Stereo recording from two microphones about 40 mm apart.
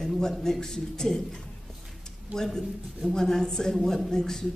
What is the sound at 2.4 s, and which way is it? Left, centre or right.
A man's voice, centre.